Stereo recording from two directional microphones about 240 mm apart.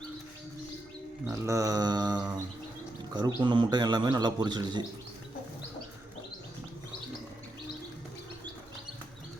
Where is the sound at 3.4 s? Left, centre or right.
Centre.